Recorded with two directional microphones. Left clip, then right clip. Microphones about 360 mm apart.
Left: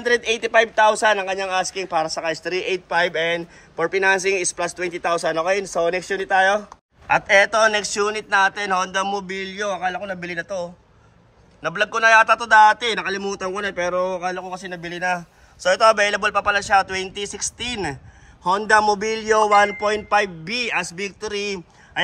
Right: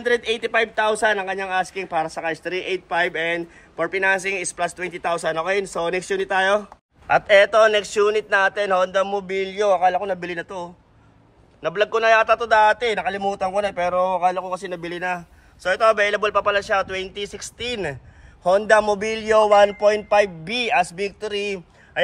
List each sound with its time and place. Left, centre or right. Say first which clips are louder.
0.0 s a man's voice: left 1 dB; centre